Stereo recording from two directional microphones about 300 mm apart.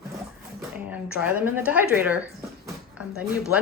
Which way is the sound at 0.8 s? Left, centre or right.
Centre.